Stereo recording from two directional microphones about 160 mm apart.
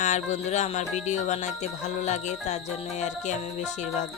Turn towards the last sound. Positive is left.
turn(degrees=50)  # may be behind; listen again after turning